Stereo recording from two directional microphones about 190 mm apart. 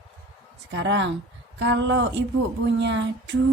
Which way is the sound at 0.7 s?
65° right (ahead or behind).